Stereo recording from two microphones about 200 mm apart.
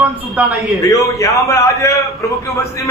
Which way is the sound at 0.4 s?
5° right (ahead or behind).